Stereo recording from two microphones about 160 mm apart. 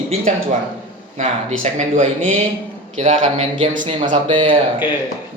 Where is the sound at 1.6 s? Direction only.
50° right (ahead or behind).